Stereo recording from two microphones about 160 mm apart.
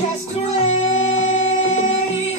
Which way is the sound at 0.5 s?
45° left (ahead or behind).